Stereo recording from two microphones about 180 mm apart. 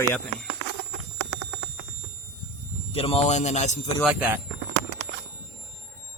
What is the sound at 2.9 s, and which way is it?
Speech, 35° left (ahead or behind).